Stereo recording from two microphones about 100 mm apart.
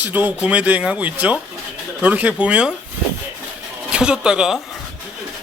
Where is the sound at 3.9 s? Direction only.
10° right (ahead or behind).